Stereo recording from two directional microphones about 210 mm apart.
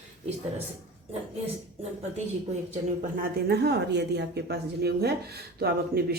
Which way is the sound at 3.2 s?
50° right (ahead or behind).